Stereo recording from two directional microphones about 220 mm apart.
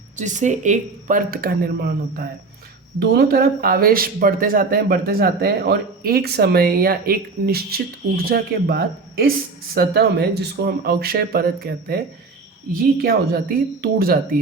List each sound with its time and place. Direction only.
0.2 s speech: 35° right (ahead or behind)
13.0 s speech: 45° right (ahead or behind)